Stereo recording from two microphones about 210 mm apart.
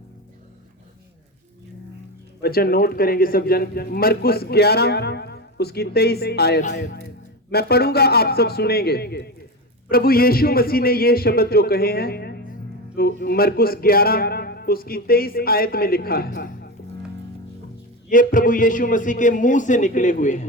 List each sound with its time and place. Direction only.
2.4 s a man's voice: 45° left (ahead or behind)
18.1 s a man's voice: 40° left (ahead or behind)